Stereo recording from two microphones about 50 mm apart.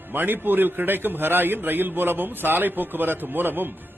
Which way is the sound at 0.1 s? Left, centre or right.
Right.